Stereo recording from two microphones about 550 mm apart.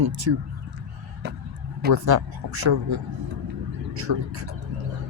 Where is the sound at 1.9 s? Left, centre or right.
Right.